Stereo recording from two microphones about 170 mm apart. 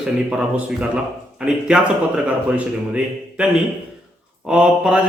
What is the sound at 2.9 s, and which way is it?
A man's voice, 5° right (ahead or behind).